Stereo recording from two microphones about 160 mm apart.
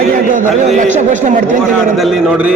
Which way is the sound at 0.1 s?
60° right (ahead or behind).